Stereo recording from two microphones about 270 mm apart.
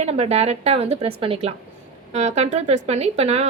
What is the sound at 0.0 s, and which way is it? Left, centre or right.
A woman's voice, right.